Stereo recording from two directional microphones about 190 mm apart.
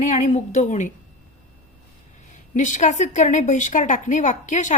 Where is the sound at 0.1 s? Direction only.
40° left (ahead or behind).